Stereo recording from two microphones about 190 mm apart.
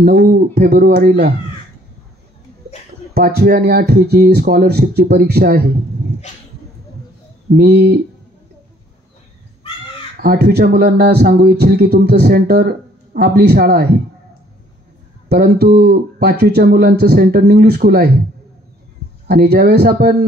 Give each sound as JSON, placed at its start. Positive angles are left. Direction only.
{"t": 0.0, "sound": "speech", "side_deg": -50}
{"t": 3.2, "sound": "speech", "side_deg": -55}
{"t": 7.5, "sound": "speech", "side_deg": -55}
{"t": 10.1, "sound": "speech", "side_deg": -50}
{"t": 15.2, "sound": "speech", "side_deg": -55}
{"t": 19.2, "sound": "speech", "side_deg": -55}